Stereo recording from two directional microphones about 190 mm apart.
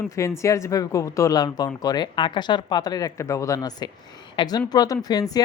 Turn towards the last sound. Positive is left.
turn(degrees=20)  # may be behind; listen again after turning